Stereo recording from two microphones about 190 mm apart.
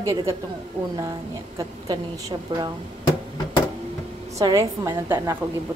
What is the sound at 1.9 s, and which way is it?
Speech, 20° right (ahead or behind).